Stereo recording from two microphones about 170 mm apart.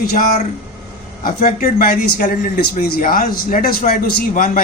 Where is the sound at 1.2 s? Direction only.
55° left (ahead or behind).